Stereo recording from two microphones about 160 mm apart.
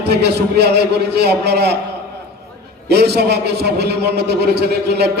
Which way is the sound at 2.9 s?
90° right.